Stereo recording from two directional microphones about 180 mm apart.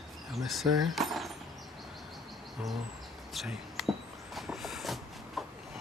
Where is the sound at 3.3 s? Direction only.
Centre (ahead or behind).